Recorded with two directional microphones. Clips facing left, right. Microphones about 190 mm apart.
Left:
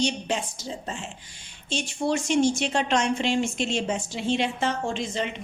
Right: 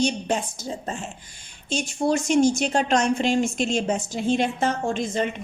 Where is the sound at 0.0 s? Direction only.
50° right (ahead or behind).